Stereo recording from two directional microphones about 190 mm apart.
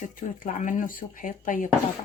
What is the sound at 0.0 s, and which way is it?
Speech, 45° left (ahead or behind).